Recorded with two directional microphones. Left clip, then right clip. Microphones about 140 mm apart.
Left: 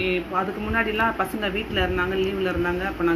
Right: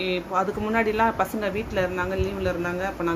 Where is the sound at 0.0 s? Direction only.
50° right (ahead or behind).